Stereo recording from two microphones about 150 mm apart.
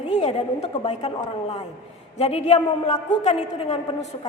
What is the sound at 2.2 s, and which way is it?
A woman's voice, 45° left (ahead or behind).